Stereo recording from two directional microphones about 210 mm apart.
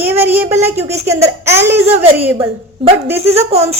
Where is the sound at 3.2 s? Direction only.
30° right (ahead or behind).